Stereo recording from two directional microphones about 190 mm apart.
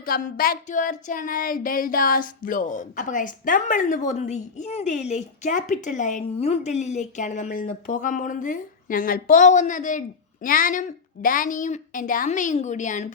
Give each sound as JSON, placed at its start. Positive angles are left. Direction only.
{"t": 0.0, "sound": "a woman's voice", "side_deg": 50}